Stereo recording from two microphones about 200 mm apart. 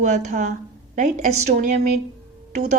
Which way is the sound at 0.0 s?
35° right (ahead or behind).